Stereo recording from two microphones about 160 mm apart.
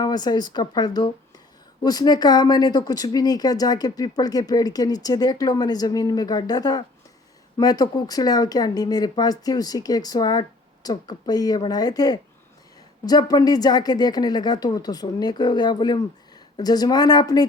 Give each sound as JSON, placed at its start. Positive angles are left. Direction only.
{"t": 0.0, "sound": "speech", "side_deg": 25}